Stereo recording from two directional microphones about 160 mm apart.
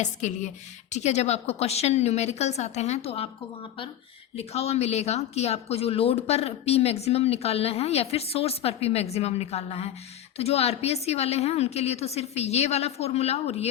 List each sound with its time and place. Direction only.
0.0 s a woman's voice: 50° left (ahead or behind)